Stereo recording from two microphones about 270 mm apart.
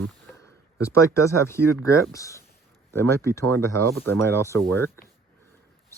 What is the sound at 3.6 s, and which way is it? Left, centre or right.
Speech, right.